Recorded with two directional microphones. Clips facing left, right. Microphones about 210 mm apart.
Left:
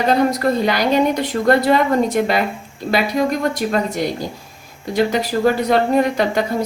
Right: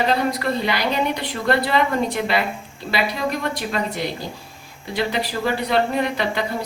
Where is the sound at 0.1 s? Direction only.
45° left (ahead or behind).